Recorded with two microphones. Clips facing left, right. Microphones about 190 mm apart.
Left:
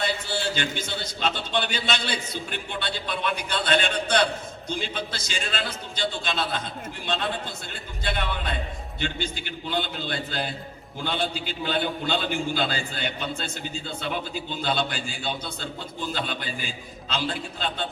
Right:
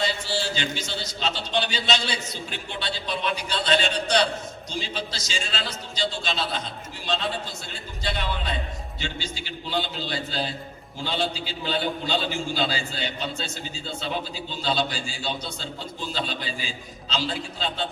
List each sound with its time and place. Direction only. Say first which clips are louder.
0.0 s a man's voice: even; 55° left (ahead or behind)